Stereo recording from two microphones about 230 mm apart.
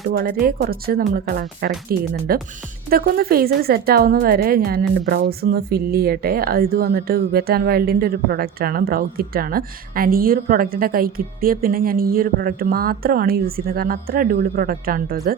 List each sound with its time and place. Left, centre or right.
0.1 s a woman's voice: right